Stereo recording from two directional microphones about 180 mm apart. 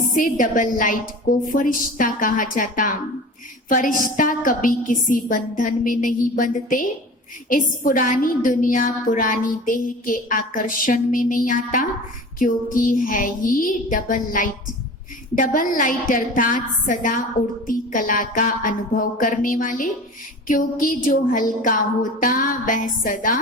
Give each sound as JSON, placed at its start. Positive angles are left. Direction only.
{"t": 0.2, "sound": "a woman's voice", "side_deg": 50}